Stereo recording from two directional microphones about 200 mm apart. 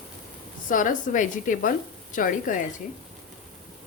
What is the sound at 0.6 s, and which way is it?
A woman's voice, 40° left (ahead or behind).